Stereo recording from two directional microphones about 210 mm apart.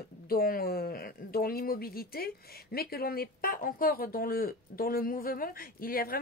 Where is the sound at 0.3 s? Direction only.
45° left (ahead or behind).